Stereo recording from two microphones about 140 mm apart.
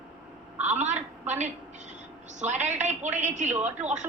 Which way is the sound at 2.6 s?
55° right (ahead or behind).